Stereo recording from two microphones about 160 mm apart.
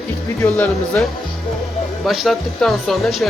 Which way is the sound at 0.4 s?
15° left (ahead or behind).